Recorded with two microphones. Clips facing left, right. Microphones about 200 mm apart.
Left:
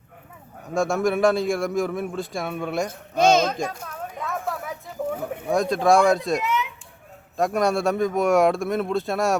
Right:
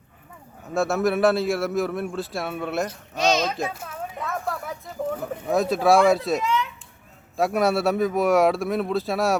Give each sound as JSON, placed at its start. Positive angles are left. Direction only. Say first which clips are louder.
{"t": 0.7, "sound": "a man's voice", "louder": "even", "side_deg": -5}
{"t": 3.2, "sound": "speech", "louder": "left 4 dB", "side_deg": 50}
{"t": 3.5, "sound": "a man's voice", "louder": "even", "side_deg": -5}